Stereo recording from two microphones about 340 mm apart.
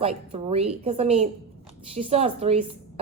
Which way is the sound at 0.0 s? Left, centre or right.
Centre.